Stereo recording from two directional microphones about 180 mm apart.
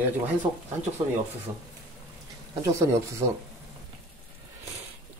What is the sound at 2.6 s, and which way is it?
Speech, 15° right (ahead or behind).